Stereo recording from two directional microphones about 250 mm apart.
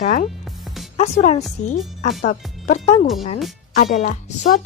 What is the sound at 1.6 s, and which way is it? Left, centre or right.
A woman's voice, left.